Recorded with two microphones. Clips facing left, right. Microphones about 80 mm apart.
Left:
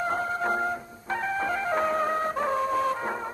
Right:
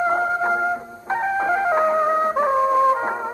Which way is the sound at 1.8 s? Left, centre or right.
Right.